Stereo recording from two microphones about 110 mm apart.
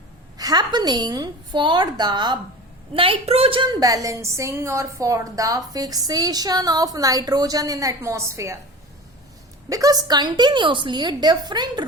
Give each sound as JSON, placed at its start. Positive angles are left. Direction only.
{"t": 0.3, "sound": "a woman's voice", "side_deg": -35}
{"t": 2.9, "sound": "a woman's voice", "side_deg": -55}
{"t": 3.6, "sound": "a woman's voice", "side_deg": -35}
{"t": 9.6, "sound": "a woman's voice", "side_deg": -30}